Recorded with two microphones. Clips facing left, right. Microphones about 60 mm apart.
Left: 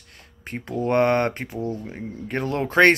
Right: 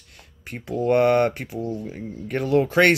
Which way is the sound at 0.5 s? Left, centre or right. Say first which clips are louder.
Left 3 dB; left.